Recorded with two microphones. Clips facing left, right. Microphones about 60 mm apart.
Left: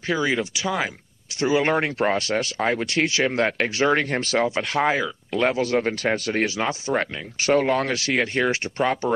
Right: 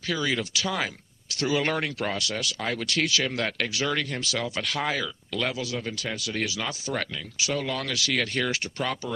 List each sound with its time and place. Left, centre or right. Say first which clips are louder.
0.1 s speech: left 5 dB; left